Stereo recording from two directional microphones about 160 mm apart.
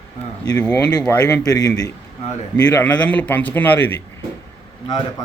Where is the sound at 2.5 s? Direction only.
10° left (ahead or behind).